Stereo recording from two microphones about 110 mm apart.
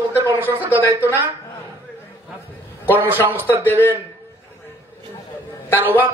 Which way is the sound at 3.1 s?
20° right (ahead or behind).